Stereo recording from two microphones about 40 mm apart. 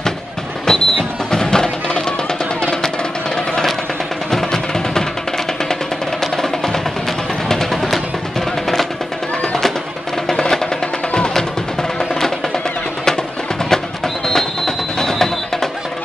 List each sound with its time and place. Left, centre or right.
0.7 s music: centre
4.3 s music: centre
6.3 s music: centre
10.2 s music: centre
13.7 s music: centre